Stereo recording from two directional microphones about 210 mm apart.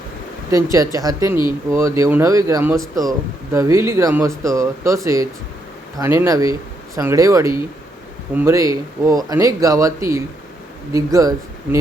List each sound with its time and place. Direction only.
0.5 s speech: 15° right (ahead or behind)